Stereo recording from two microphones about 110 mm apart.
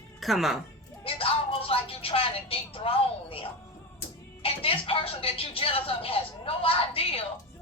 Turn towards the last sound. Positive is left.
turn(degrees=60)  # may be behind; listen again after turning